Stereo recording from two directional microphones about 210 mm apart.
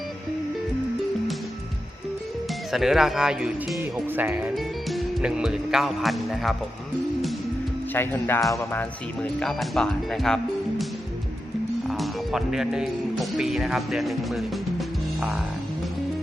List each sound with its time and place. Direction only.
2.7 s speech: centre (ahead or behind)
7.9 s speech: 10° left (ahead or behind)
11.9 s speech: centre (ahead or behind)